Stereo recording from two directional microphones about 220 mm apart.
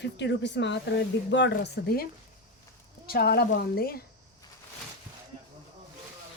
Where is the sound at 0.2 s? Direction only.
55° left (ahead or behind).